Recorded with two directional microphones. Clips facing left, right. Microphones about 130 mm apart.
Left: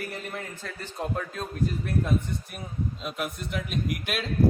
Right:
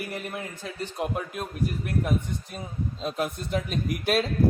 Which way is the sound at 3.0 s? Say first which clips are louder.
Right 4 dB; 30° right (ahead or behind).